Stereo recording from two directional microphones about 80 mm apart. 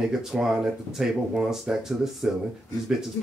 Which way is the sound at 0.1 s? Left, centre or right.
Centre.